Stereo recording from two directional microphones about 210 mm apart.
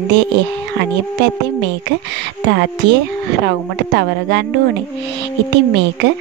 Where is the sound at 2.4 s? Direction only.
55° right (ahead or behind).